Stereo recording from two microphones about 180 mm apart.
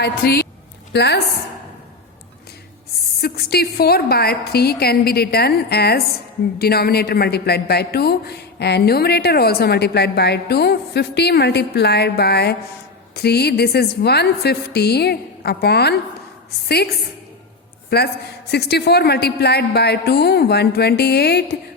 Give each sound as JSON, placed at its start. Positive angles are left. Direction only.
{"t": 0.0, "sound": "a woman's voice", "side_deg": 65}
{"t": 3.2, "sound": "a woman's voice", "side_deg": 60}